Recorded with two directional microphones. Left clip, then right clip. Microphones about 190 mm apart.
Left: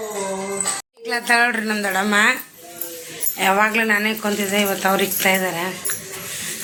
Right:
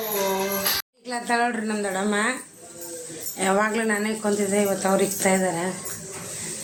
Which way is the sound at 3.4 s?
15° right (ahead or behind).